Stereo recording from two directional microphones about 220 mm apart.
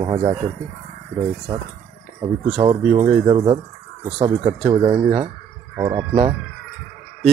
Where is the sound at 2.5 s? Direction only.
30° right (ahead or behind).